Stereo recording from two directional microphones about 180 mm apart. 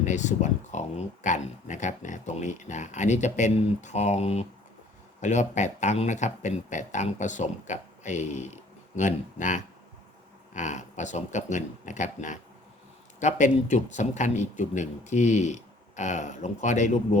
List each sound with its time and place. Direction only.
0.0 s speech: 40° left (ahead or behind)